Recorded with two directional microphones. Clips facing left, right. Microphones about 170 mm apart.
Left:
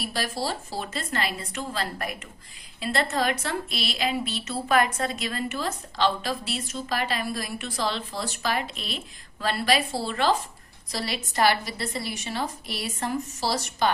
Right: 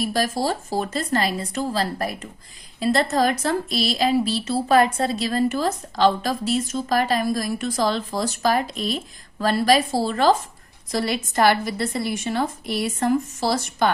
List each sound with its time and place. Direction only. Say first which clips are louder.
0.0 s a woman's voice: right 7 dB; 45° right (ahead or behind)